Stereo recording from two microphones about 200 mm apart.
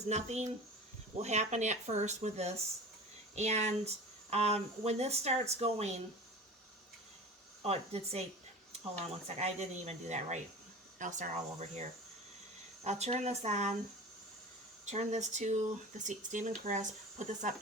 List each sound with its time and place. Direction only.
0.1 s speech: 35° right (ahead or behind)
7.6 s speech: 30° right (ahead or behind)
9.2 s speech: 35° right (ahead or behind)
14.8 s speech: 35° right (ahead or behind)